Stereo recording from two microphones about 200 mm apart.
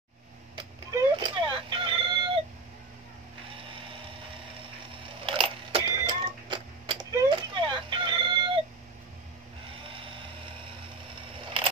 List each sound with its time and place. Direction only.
0.9 s chicken: 25° right (ahead or behind)
5.2 s a sound: 25° right (ahead or behind)
9.8 s vehicle: 25° right (ahead or behind)